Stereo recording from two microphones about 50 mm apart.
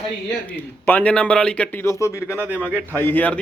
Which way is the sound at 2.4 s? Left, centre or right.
Right.